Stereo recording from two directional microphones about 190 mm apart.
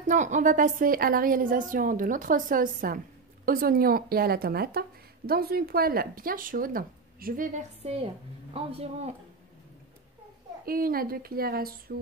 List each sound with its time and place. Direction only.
0.0 s a woman's voice: 40° right (ahead or behind)
10.6 s a woman's voice: 50° right (ahead or behind)